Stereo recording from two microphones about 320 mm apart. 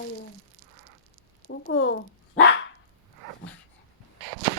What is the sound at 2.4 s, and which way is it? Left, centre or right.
Dog, left.